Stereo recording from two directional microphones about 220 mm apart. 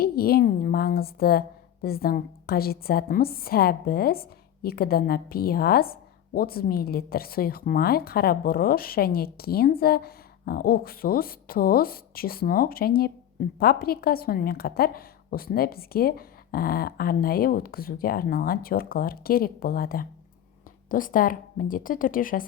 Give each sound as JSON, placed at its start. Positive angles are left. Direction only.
{"t": 0.0, "sound": "a woman's voice", "side_deg": 45}